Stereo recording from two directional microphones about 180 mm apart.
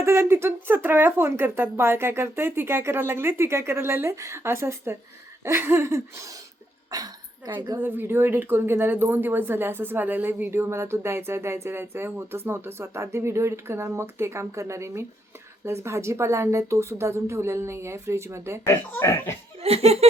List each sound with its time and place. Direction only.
0.0 s a woman's voice: 15° right (ahead or behind)
7.8 s speech: 10° right (ahead or behind)
18.6 s speech: 15° left (ahead or behind)
19.5 s laughter: 35° right (ahead or behind)